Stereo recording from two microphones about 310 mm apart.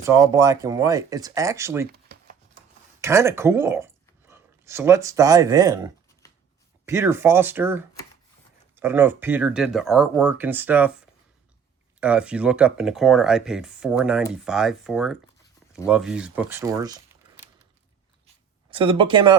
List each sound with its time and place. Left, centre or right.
0.0 s speech: centre
1.9 s shuffling cards: right
3.0 s speech: centre
18.7 s speech: centre